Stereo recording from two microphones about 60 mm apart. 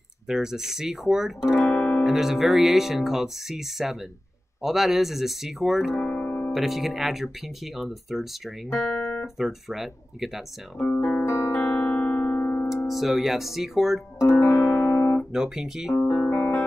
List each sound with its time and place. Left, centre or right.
0.3 s speech: centre
1.6 s guitar: left
2.0 s speech: centre
6.0 s music: left
6.5 s speech: centre
11.0 s music: centre
11.2 s music: left
12.8 s speech: centre
14.1 s music: left
14.9 s guitar: left
15.3 s speech: centre
16.3 s music: left